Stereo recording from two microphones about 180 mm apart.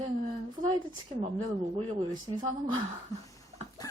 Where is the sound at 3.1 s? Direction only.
20° left (ahead or behind).